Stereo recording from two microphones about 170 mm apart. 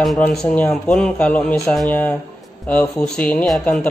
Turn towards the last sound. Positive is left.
turn(degrees=5)  # may be behind; listen again after turning